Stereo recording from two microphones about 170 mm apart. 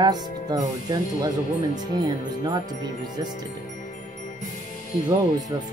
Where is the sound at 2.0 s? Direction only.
25° right (ahead or behind).